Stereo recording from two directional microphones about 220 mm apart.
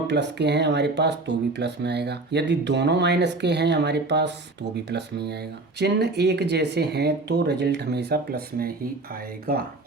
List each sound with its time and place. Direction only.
0.1 s speech: 50° right (ahead or behind)